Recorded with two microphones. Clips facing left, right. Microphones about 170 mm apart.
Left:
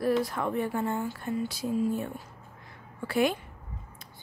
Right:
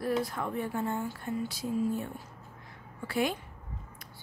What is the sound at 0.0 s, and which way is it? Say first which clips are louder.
Speech: left 4 dB; 90° left.